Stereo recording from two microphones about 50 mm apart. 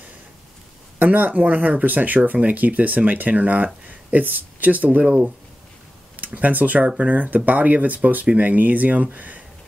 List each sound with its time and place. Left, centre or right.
0.9 s speech: right
5.0 s speech: centre
6.1 s speech: right